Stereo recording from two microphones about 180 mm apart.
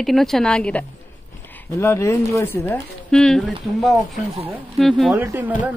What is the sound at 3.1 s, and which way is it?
A woman's voice, 5° left (ahead or behind).